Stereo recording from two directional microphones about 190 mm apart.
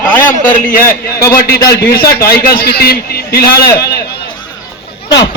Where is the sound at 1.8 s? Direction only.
55° left (ahead or behind).